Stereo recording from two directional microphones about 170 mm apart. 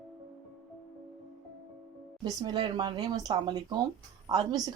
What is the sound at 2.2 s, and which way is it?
Speech, 25° right (ahead or behind).